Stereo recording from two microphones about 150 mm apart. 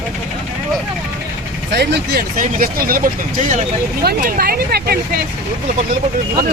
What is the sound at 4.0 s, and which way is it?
Speech, 90° right.